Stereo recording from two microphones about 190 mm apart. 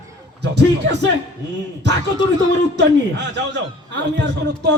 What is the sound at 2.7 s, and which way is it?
A man's voice, 65° right (ahead or behind).